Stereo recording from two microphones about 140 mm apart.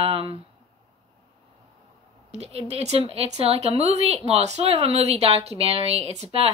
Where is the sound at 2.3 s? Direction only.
50° right (ahead or behind).